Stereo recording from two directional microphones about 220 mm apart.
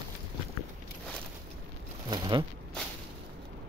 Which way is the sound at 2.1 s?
20° right (ahead or behind).